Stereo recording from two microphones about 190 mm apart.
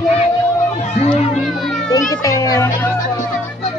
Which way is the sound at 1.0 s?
35° left (ahead or behind).